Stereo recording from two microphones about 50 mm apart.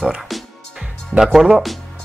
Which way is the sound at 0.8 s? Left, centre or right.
Centre.